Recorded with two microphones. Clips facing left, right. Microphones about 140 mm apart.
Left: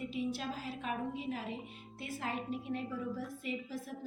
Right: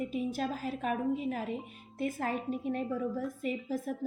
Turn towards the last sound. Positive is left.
turn(degrees=-45)  # may be behind; listen again after turning